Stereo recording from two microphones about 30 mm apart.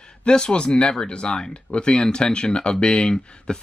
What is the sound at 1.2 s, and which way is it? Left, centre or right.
Speech, centre.